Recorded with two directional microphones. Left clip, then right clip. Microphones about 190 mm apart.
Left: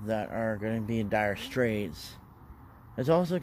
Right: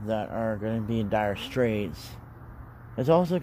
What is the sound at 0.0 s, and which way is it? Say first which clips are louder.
Speech: right 2 dB; 25° left (ahead or behind).